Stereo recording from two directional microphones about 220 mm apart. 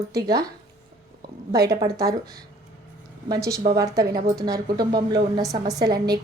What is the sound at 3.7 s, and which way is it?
Speech, 15° right (ahead or behind).